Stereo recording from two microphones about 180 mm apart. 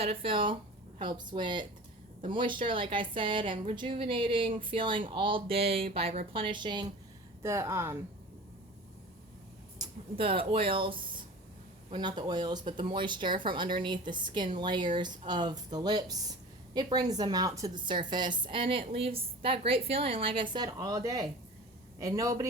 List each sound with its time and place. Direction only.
0.0 s a woman's voice: 30° right (ahead or behind)
7.4 s speech: 15° right (ahead or behind)
9.7 s a woman's voice: 25° right (ahead or behind)